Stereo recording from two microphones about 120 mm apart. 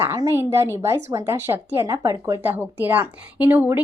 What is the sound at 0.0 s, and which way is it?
A woman's voice, 20° right (ahead or behind).